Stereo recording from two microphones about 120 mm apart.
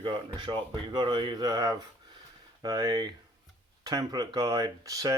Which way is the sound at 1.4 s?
30° right (ahead or behind).